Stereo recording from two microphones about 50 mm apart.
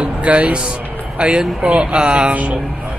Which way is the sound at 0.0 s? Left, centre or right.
Right.